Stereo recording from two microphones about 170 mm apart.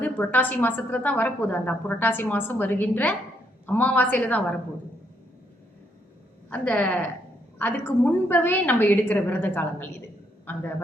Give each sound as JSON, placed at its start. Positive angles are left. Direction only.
{"t": 0.0, "sound": "a woman's voice", "side_deg": 10}
{"t": 6.5, "sound": "a woman's voice", "side_deg": 5}